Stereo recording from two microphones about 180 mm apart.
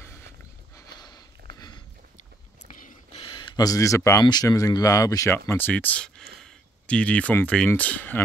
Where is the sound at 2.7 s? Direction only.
45° left (ahead or behind).